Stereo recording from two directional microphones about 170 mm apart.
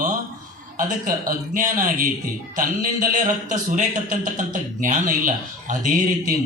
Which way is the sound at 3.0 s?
50° right (ahead or behind).